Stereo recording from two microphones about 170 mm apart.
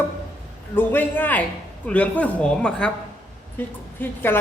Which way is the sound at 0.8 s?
10° left (ahead or behind).